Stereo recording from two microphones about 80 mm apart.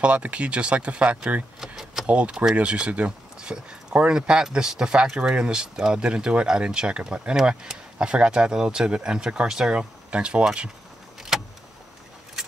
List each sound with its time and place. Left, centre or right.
0.0 s speech: centre
11.3 s vehicle: centre